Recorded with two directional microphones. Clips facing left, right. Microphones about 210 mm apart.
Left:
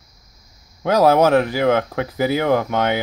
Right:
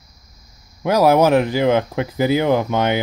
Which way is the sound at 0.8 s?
10° right (ahead or behind).